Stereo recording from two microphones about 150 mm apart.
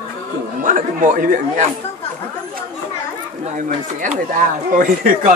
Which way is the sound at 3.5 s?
60° right (ahead or behind).